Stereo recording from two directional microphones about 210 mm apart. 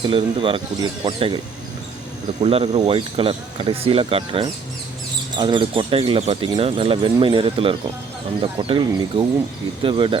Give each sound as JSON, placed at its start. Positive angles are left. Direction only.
{"t": 0.0, "sound": "speech", "side_deg": -25}
{"t": 2.4, "sound": "speech", "side_deg": -30}